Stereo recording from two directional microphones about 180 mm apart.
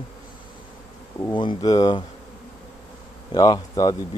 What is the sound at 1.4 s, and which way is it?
Speech, 25° left (ahead or behind).